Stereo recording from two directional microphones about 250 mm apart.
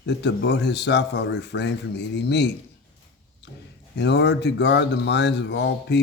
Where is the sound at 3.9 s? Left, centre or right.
Left.